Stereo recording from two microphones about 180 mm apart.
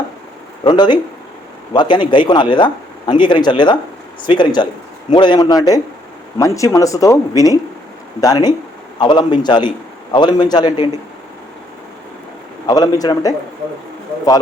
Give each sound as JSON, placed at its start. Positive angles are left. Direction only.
{"t": 0.6, "sound": "a man's voice", "side_deg": 25}
{"t": 12.6, "sound": "a man's voice", "side_deg": 20}